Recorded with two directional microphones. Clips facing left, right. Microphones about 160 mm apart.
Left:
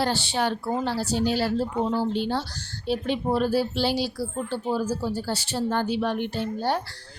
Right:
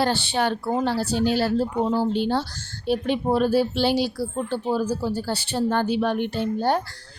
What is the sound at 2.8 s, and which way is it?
A woman's voice, 55° right (ahead or behind).